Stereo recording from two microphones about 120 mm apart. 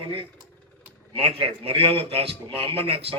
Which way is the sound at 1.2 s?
55° right (ahead or behind).